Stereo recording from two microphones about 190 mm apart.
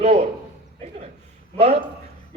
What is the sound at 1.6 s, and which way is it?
Speech, 30° right (ahead or behind).